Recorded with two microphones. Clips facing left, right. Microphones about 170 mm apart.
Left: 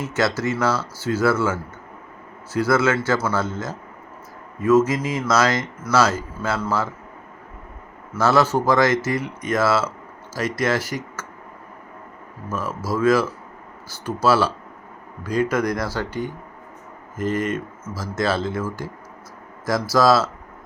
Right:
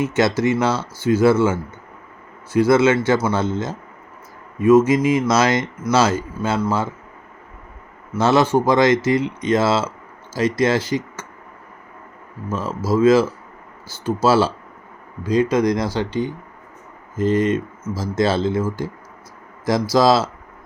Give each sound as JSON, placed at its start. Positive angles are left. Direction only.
{"t": 0.0, "sound": "speech", "side_deg": -20}
{"t": 4.9, "sound": "speech", "side_deg": -20}
{"t": 8.1, "sound": "speech", "side_deg": -20}
{"t": 12.5, "sound": "speech", "side_deg": -20}